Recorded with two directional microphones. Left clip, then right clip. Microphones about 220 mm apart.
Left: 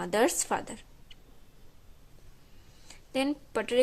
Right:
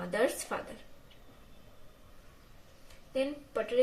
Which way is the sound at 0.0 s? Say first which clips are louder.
Left 4 dB; 35° left (ahead or behind).